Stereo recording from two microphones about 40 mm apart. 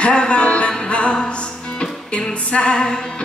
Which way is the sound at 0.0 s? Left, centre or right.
Left.